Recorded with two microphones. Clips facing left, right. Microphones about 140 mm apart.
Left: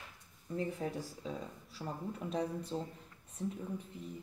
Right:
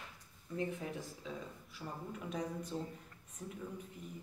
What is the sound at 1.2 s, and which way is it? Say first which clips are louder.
Speech: left 3 dB; 35° left (ahead or behind).